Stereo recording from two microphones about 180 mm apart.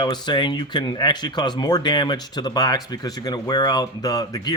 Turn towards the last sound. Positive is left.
turn(degrees=20)  # may be behind; listen again after turning